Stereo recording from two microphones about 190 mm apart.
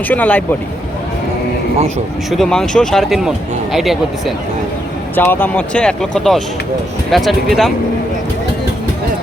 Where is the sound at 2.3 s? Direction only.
Centre (ahead or behind).